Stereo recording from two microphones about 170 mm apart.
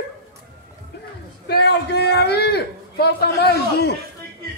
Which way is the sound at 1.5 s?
75° left (ahead or behind).